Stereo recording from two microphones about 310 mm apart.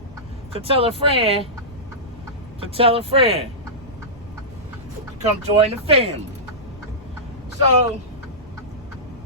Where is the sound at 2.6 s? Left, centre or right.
Centre.